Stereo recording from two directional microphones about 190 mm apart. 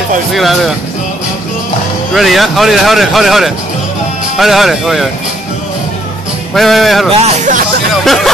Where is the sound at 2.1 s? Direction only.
Centre (ahead or behind).